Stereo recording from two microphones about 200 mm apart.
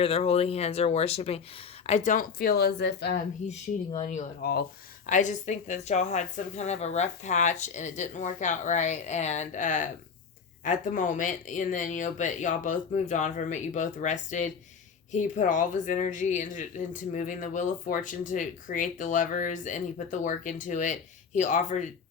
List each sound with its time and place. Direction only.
0.0 s speech: 30° left (ahead or behind)
1.9 s speech: 40° left (ahead or behind); by 3.2 s 55° left (ahead or behind)
3.4 s speech: 35° left (ahead or behind)